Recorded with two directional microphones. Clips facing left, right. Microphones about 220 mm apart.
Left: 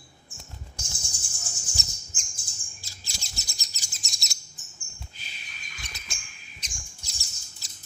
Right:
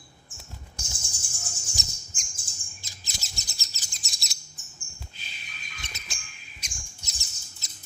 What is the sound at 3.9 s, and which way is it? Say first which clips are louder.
Chirp: even; centre (ahead or behind).